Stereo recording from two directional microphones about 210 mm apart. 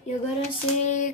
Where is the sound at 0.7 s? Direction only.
35° left (ahead or behind).